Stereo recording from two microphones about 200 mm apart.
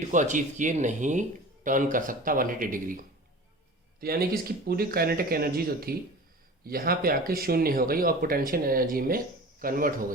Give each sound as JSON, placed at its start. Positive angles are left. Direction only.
{"t": 0.1, "sound": "speech", "side_deg": -40}